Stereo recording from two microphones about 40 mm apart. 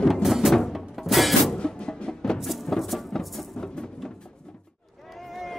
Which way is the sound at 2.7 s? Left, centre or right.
Centre.